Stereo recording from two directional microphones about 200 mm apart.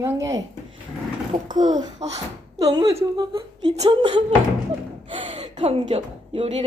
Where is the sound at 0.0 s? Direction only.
15° right (ahead or behind).